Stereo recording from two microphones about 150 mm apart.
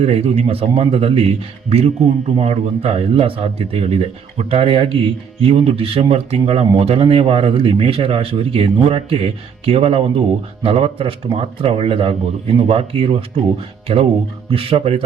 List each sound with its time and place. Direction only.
0.0 s speech: 45° right (ahead or behind)